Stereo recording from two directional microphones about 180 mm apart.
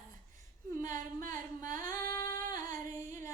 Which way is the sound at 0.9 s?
45° right (ahead or behind).